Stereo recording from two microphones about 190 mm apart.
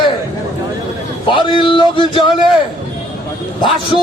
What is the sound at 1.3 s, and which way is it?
Music, 25° left (ahead or behind).